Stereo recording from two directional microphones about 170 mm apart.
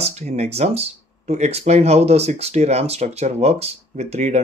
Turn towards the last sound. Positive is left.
turn(degrees=-40)  # may be behind; listen again after turning